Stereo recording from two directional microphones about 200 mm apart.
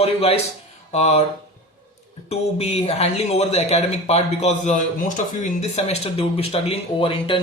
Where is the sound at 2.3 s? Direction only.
30° left (ahead or behind).